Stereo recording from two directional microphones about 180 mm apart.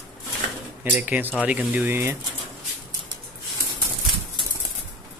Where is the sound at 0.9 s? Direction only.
10° right (ahead or behind).